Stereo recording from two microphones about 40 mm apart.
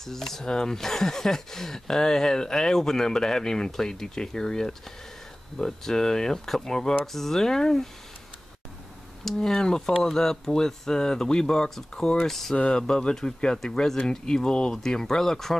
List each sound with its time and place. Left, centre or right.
0.0 s speech: centre
9.2 s speech: centre
12.3 s speech: centre
12.5 s speech: left